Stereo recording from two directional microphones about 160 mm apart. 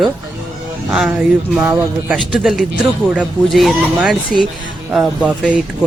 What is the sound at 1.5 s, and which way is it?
Speech, 15° right (ahead or behind).